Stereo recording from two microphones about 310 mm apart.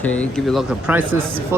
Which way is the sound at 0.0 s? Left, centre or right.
Centre.